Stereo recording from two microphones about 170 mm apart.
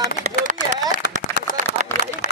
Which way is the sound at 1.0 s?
75° left (ahead or behind).